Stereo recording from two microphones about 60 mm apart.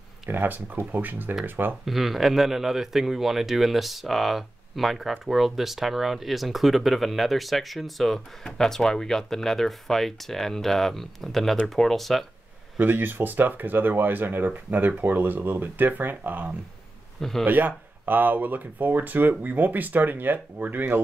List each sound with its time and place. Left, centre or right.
0.3 s speech: right
1.9 s speech: centre
12.7 s speech: right
17.2 s speech: centre
17.5 s speech: right